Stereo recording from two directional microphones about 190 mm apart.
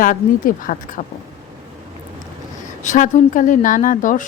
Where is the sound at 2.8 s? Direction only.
40° left (ahead or behind).